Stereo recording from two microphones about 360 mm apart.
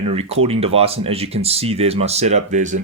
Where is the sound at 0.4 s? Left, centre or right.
Centre.